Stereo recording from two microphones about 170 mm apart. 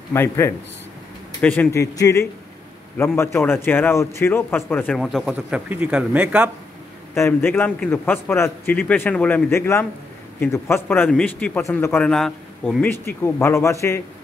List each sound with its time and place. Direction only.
0.1 s speech: 15° left (ahead or behind); by 6.5 s 10° right (ahead or behind)
7.2 s speech: 15° left (ahead or behind)